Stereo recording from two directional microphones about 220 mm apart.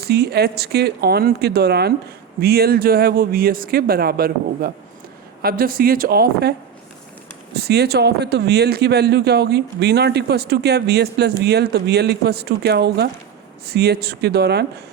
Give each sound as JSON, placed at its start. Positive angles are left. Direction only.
{"t": 0.1, "sound": "speech", "side_deg": -45}
{"t": 7.5, "sound": "speech", "side_deg": -45}